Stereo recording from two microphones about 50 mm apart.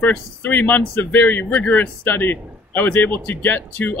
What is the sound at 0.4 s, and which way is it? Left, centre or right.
Speech, left.